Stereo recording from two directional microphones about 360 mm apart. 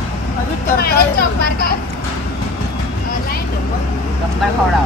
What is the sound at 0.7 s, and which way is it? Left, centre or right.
Speech, left.